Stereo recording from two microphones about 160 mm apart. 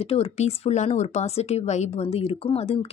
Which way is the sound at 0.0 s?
40° left (ahead or behind).